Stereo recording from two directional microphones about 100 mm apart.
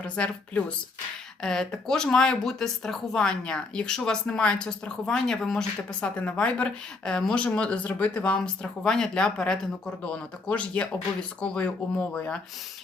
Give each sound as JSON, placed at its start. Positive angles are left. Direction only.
{"t": 0.2, "sound": "speech", "side_deg": 10}
{"t": 1.4, "sound": "speech", "side_deg": 5}